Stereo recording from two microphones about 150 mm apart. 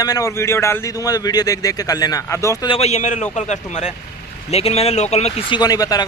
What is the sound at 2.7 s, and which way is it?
A man's voice, 45° left (ahead or behind).